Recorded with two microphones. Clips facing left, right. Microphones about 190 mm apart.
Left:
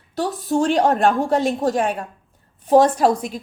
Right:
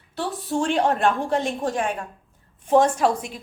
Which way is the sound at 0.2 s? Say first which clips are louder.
Left 5 dB; 40° left (ahead or behind).